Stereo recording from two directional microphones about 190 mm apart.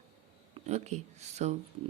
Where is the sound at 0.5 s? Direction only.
35° right (ahead or behind).